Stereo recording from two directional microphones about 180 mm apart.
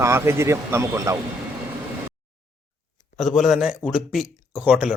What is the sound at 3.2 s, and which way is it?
A man's voice, centre (ahead or behind).